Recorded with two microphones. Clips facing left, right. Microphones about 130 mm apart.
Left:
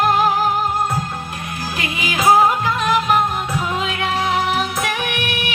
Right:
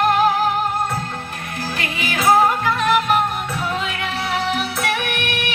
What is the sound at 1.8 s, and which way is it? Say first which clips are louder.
Music: left 3 dB; 15° left (ahead or behind).